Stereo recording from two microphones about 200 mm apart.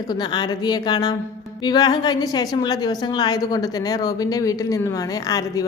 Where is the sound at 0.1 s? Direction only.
20° left (ahead or behind).